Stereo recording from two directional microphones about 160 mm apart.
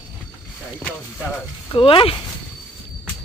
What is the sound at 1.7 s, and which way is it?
Speech, 30° left (ahead or behind).